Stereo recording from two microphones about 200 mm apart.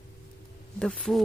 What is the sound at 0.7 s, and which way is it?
Speech, 5° left (ahead or behind).